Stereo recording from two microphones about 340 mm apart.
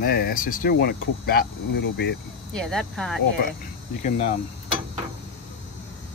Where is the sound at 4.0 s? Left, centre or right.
Centre.